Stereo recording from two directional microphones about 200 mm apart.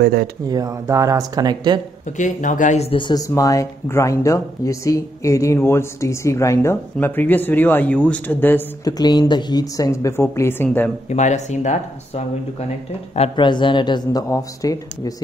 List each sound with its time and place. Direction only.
0.0 s speech: 50° right (ahead or behind)
0.5 s speech: 15° right (ahead or behind)
2.1 s speech: 40° left (ahead or behind); by 10.9 s 10° left (ahead or behind)
11.1 s speech: 35° left (ahead or behind); by 15.2 s 20° left (ahead or behind)